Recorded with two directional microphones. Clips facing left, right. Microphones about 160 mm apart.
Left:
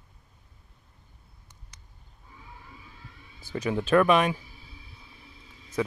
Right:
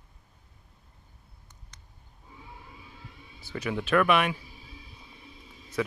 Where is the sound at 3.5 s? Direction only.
25° left (ahead or behind).